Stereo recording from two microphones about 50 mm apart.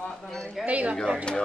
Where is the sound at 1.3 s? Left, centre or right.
Centre.